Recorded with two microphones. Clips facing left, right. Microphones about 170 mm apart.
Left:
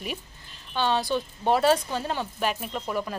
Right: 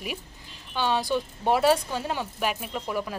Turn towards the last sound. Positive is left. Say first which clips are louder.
# even
turn(degrees=-5)  # may be behind; listen again after turning